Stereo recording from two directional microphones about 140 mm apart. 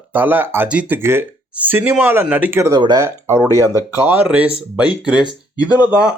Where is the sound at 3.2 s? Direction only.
20° right (ahead or behind).